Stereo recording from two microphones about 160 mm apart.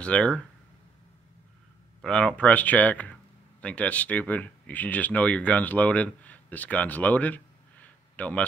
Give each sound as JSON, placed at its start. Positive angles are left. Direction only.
{"t": 0.0, "sound": "speech", "side_deg": 5}
{"t": 2.0, "sound": "speech", "side_deg": 5}